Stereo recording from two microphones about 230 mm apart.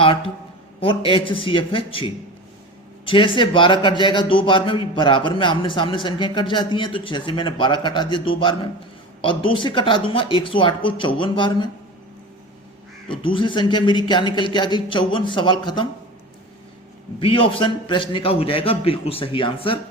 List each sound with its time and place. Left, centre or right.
0.8 s a man's voice: left
13.1 s a man's voice: left
17.2 s a man's voice: left